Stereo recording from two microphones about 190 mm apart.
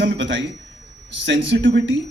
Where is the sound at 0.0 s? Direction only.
70° right (ahead or behind).